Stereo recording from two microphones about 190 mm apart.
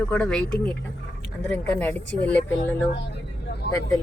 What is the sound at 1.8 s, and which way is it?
Speech, 10° left (ahead or behind).